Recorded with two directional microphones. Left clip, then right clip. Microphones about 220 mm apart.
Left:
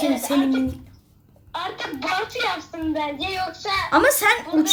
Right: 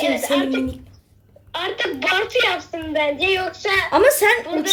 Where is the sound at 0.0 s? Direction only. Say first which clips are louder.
Right 2 dB; 45° right (ahead or behind).